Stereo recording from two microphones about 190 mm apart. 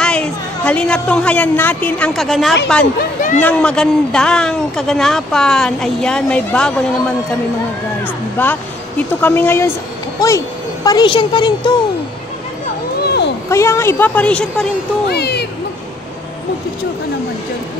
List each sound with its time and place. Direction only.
0.0 s a woman's voice: 5° left (ahead or behind)
2.8 s speech: 50° left (ahead or behind)
3.4 s speech: 5° left (ahead or behind)
8.4 s speech: 10° left (ahead or behind)
13.0 s a sound: 60° left (ahead or behind)
13.5 s speech: 15° left (ahead or behind)
15.0 s speech: 60° left (ahead or behind)